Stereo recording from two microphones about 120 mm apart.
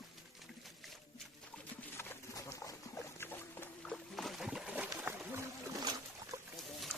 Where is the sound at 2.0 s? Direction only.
20° left (ahead or behind); by 5.1 s 10° right (ahead or behind).